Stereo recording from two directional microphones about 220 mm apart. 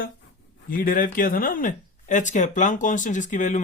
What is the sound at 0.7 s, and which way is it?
A man's voice, 40° left (ahead or behind).